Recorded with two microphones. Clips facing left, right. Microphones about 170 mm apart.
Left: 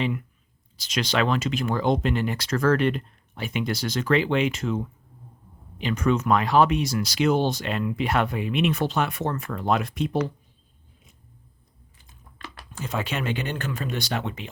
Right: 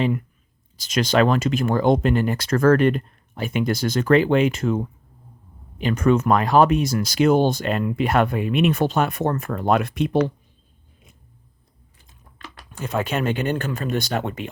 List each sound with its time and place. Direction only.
0.8 s speech: 45° right (ahead or behind); by 10.3 s 75° right (ahead or behind)
12.8 s speech: 50° right (ahead or behind)